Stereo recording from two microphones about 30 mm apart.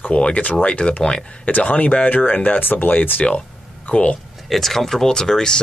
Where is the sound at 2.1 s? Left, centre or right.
Left.